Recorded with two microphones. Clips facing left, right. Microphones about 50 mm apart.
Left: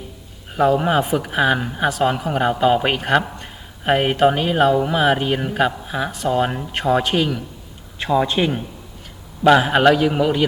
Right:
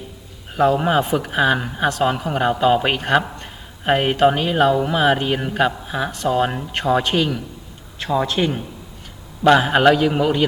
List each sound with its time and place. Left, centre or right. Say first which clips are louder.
0.5 s speech: even; centre
8.1 s a man's voice: left 2 dB; centre
9.4 s speech: even; centre